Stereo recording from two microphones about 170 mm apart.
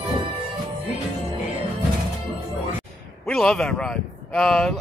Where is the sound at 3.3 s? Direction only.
5° left (ahead or behind).